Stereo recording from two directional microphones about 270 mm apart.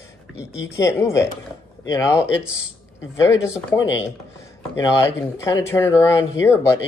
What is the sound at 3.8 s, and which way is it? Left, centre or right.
Speech, left.